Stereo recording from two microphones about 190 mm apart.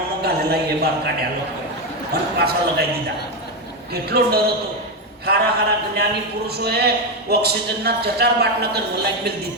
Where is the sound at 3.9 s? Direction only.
55° right (ahead or behind).